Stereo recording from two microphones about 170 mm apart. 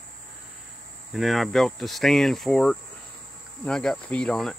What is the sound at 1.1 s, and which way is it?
Speech, centre (ahead or behind).